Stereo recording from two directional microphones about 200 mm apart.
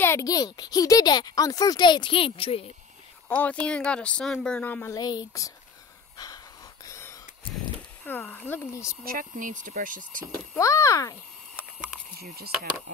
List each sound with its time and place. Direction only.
0.0 s speech: 15° left (ahead or behind)
3.3 s speech: 5° left (ahead or behind)
6.1 s wheeze: 20° left (ahead or behind)
8.0 s speech: 10° left (ahead or behind)
9.0 s speech: 45° right (ahead or behind)
10.6 s speech: 15° left (ahead or behind)